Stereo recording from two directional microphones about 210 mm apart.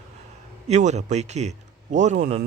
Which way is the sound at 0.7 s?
35° right (ahead or behind).